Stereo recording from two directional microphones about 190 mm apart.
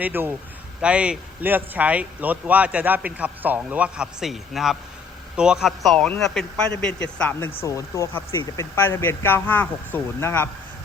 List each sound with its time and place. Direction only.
0.0 s a man's voice: 10° right (ahead or behind); by 10.5 s 15° left (ahead or behind)